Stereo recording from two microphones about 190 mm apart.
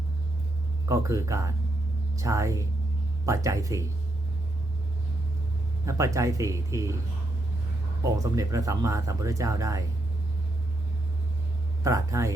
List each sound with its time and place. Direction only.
0.9 s speech: 15° right (ahead or behind)
5.8 s speech: 15° right (ahead or behind)
8.0 s speech: 15° right (ahead or behind)
11.8 s speech: 15° right (ahead or behind)